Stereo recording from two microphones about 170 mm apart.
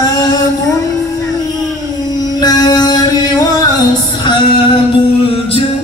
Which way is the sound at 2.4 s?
20° left (ahead or behind).